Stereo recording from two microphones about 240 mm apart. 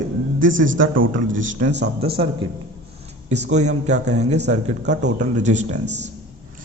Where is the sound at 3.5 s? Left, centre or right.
Right.